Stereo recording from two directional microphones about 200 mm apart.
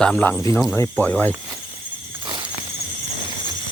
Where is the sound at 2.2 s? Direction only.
25° right (ahead or behind).